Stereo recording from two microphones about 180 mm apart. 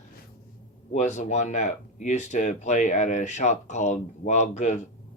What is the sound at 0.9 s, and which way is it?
Speech, 45° left (ahead or behind).